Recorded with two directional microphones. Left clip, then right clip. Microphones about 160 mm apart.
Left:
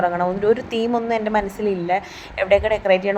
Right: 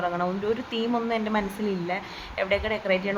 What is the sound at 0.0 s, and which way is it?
A woman's voice, 35° left (ahead or behind).